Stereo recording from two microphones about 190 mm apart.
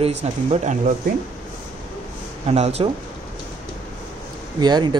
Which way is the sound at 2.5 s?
35° right (ahead or behind).